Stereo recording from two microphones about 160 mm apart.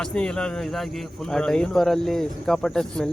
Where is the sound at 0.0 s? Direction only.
5° left (ahead or behind).